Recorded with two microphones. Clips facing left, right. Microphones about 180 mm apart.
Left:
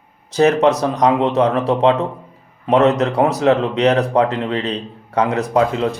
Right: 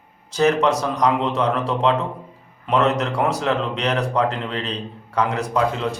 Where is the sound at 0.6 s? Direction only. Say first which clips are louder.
Left 5 dB; 25° left (ahead or behind).